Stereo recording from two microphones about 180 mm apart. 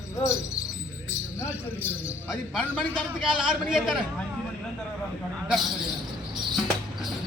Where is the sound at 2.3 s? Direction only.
Centre (ahead or behind).